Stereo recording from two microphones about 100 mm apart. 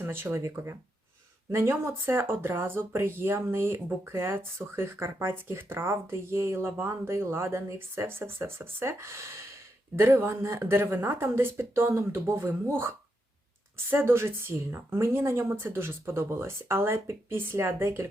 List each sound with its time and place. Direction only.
0.0 s speech: 20° right (ahead or behind)
13.9 s speech: 25° right (ahead or behind)